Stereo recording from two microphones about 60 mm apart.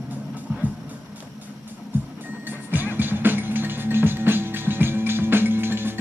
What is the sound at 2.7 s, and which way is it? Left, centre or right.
Music, right.